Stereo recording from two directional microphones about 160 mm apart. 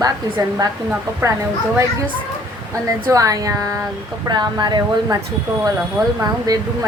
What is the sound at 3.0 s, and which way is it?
Speech, 20° right (ahead or behind).